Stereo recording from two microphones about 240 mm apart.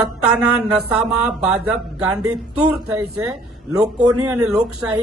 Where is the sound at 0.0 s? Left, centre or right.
Centre.